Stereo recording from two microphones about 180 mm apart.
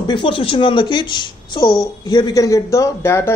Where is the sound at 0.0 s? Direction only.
25° left (ahead or behind).